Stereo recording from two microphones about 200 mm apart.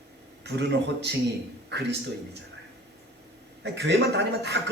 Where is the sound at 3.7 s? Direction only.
55° right (ahead or behind).